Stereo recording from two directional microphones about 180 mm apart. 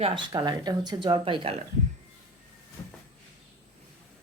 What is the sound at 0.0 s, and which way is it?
Speech, 25° right (ahead or behind).